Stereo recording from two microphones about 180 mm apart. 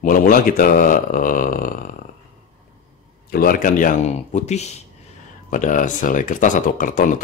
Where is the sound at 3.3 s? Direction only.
55° left (ahead or behind).